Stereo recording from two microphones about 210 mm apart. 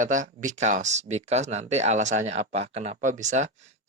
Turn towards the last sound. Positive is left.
turn(degrees=-35)  # may be behind; listen again after turning